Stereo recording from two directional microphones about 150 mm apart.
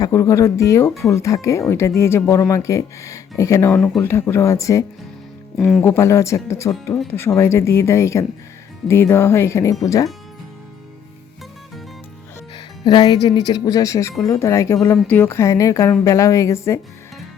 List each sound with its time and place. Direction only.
0.0 s speech: 20° left (ahead or behind)
3.8 s speech: centre (ahead or behind)
4.0 s speech: 15° left (ahead or behind)
5.5 s speech: centre (ahead or behind)
5.8 s speech: 15° left (ahead or behind)
12.5 s speech: 30° left (ahead or behind)